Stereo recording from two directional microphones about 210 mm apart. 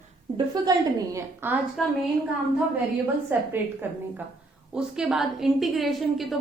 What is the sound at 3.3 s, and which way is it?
A woman's voice, 10° right (ahead or behind).